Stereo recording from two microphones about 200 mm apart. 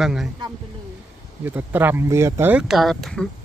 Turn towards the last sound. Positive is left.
turn(degrees=5)  # may be behind; listen again after turning